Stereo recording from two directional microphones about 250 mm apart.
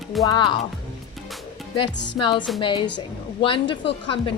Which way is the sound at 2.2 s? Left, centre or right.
Centre.